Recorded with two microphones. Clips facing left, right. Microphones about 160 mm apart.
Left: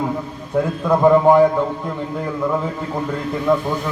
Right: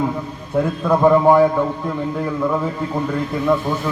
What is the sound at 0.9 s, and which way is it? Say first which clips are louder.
Speech: left 1 dB; centre (ahead or behind).